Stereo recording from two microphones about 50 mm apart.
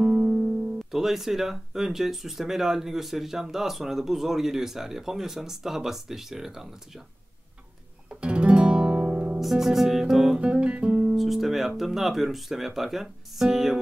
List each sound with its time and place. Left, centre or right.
0.0 s music: right
0.9 s speech: centre
8.1 s guitar: right
9.0 s music: right
9.4 s music: centre
10.4 s music: right
11.1 s speech: centre